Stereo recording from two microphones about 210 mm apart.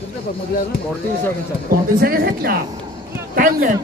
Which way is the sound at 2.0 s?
45° right (ahead or behind).